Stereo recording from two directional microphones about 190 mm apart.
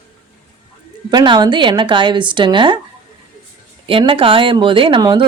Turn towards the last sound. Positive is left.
turn(degrees=-25)  # may be behind; listen again after turning